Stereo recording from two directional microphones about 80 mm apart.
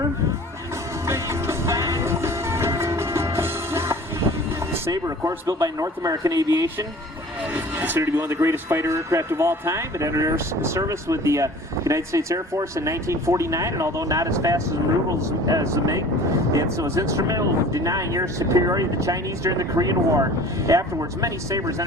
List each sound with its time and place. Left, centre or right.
1.0 s music: right
4.9 s speech: right
7.5 s vehicle: right
8.0 s speech: right